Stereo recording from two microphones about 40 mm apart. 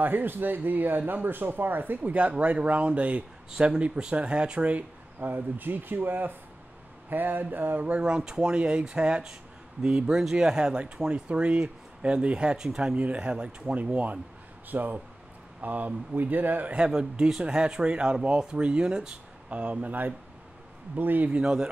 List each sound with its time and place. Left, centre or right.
0.0 s speech: right
3.5 s speech: right
5.2 s speech: right
8.0 s speech: centre; by 14.1 s right
14.7 s speech: right
16.7 s speech: right
19.5 s speech: right
21.3 s speech: right